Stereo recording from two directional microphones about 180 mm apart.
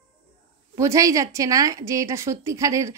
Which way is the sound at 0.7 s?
15° right (ahead or behind).